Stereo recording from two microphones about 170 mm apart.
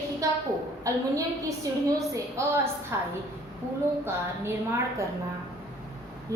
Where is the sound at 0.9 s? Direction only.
20° right (ahead or behind).